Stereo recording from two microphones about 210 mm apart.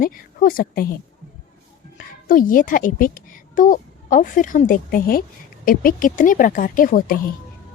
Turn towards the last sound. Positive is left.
turn(degrees=40)  # may be behind; listen again after turning